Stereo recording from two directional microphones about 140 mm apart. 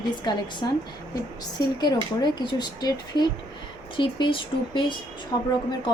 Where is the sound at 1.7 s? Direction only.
30° left (ahead or behind).